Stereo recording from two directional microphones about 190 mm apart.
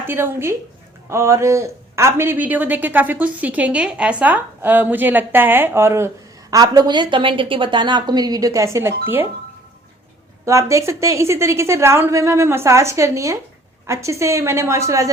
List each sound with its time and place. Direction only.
0.1 s a woman's voice: 10° right (ahead or behind)
10.4 s speech: 15° right (ahead or behind)